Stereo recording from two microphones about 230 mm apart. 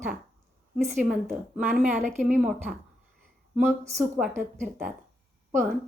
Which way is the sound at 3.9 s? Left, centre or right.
Centre.